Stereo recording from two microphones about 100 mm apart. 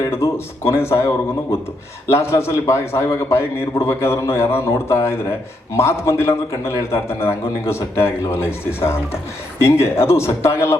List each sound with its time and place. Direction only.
0.0 s a man's voice: 25° left (ahead or behind)